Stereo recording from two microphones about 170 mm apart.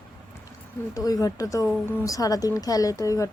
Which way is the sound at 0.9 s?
20° left (ahead or behind).